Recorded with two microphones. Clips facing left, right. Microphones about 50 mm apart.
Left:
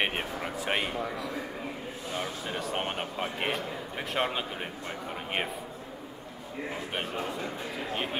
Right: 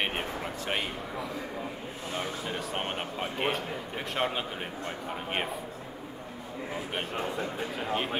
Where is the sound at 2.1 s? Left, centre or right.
Centre.